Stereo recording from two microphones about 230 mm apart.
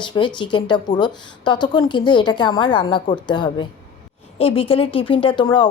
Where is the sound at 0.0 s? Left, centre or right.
Centre.